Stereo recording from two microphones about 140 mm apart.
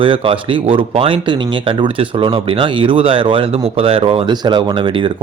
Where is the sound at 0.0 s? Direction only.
40° right (ahead or behind).